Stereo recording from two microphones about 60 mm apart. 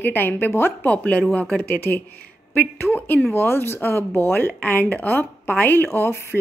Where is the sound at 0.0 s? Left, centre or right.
Left.